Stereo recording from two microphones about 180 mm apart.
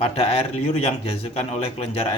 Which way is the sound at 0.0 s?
30° left (ahead or behind).